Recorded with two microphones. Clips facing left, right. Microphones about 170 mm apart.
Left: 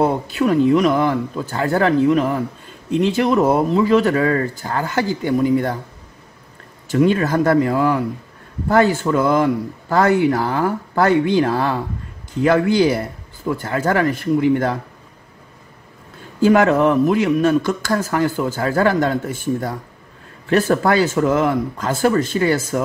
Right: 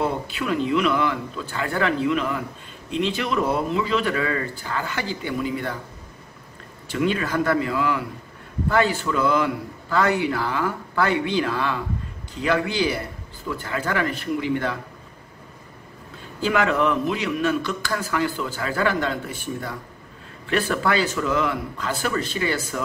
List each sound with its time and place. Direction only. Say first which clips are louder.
0.0 s speech: left 8 dB; 45° left (ahead or behind)
6.9 s speech: left 7 dB; 45° left (ahead or behind)
16.3 s speech: left 8 dB; 45° left (ahead or behind)